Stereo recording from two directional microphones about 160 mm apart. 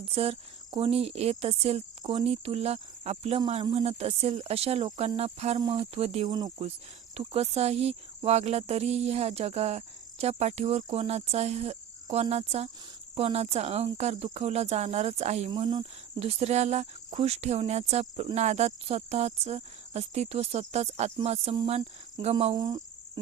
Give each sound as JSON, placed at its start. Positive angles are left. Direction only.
{"t": 0.0, "sound": "speech", "side_deg": -35}
{"t": 5.5, "sound": "speech", "side_deg": -30}
{"t": 6.2, "sound": "speech", "side_deg": -25}
{"t": 7.1, "sound": "speech", "side_deg": -40}
{"t": 14.3, "sound": "cricket", "side_deg": -40}
{"t": 15.4, "sound": "speech", "side_deg": -25}
{"t": 16.2, "sound": "cricket", "side_deg": -40}
{"t": 17.1, "sound": "speech", "side_deg": -40}
{"t": 18.3, "sound": "cricket", "side_deg": -45}
{"t": 21.2, "sound": "speech", "side_deg": -40}
{"t": 22.5, "sound": "cricket", "side_deg": -25}